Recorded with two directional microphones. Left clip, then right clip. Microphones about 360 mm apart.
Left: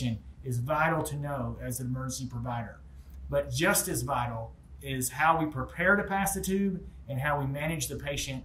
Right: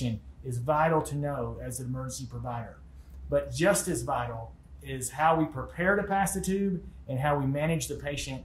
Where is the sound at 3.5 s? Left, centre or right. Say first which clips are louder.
Right 2 dB; centre.